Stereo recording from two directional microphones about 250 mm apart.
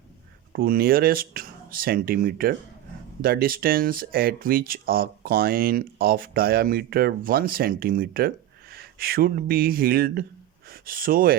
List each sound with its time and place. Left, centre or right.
0.5 s speech: right